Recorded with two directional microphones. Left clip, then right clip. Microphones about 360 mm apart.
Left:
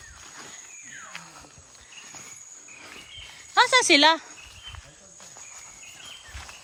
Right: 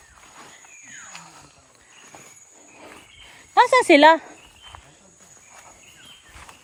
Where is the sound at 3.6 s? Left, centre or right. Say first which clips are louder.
Right 4 dB; centre.